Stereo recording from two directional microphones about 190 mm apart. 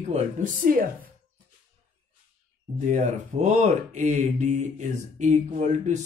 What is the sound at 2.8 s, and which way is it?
Speech, 40° right (ahead or behind).